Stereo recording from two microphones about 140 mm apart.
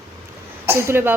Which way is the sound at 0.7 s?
15° right (ahead or behind).